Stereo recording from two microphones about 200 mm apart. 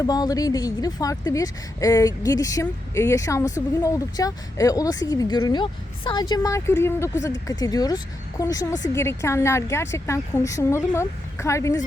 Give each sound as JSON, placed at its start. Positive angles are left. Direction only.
{"t": 0.0, "sound": "a woman's voice", "side_deg": 20}